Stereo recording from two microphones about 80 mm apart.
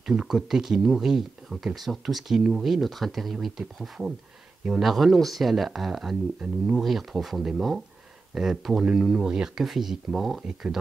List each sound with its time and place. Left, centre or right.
0.0 s speech: centre